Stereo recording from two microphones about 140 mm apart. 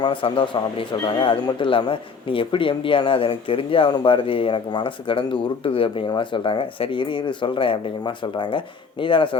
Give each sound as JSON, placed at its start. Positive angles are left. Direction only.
{"t": 0.0, "sound": "speech", "side_deg": 35}